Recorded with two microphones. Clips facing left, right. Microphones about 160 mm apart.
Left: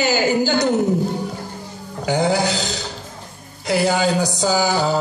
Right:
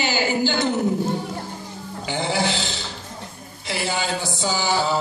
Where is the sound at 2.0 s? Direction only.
40° left (ahead or behind).